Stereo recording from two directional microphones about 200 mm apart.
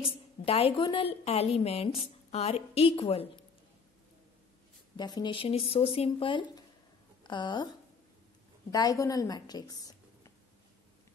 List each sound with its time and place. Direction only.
0.0 s a woman's voice: 30° left (ahead or behind)
4.9 s a woman's voice: 20° left (ahead or behind)
8.7 s a woman's voice: 15° left (ahead or behind)